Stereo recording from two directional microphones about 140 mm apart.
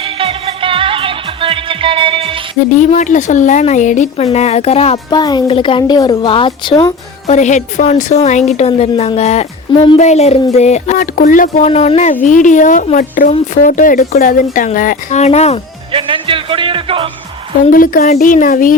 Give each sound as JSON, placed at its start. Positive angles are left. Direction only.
{"t": 0.0, "sound": "music", "side_deg": -40}
{"t": 2.8, "sound": "speech", "side_deg": 60}
{"t": 5.1, "sound": "a woman's voice", "side_deg": 30}
{"t": 7.3, "sound": "a woman's voice", "side_deg": 60}
{"t": 12.2, "sound": "speech", "side_deg": 65}
{"t": 15.9, "sound": "music", "side_deg": -40}
{"t": 17.7, "sound": "speech", "side_deg": 80}